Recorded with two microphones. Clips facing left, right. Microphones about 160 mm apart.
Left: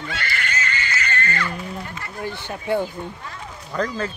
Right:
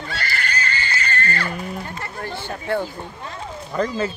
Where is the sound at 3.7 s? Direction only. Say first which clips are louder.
Right 2 dB; 5° right (ahead or behind).